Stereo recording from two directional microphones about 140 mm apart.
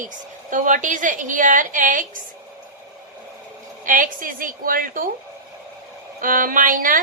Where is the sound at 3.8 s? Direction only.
70° right (ahead or behind); by 5.0 s 85° right.